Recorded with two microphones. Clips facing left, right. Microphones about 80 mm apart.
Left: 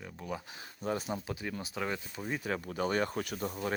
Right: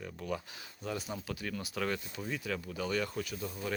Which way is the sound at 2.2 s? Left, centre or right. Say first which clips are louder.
Left 4 dB; left.